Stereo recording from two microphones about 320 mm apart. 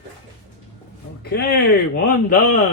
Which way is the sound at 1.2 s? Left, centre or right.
Left.